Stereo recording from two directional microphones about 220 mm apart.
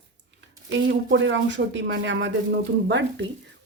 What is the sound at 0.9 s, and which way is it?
Speech, 55° right (ahead or behind).